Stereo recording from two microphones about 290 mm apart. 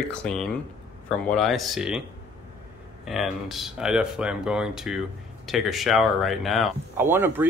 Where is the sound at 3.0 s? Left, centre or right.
Centre.